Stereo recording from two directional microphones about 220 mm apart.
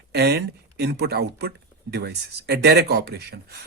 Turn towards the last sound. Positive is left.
turn(degrees=-50)  # may be behind; listen again after turning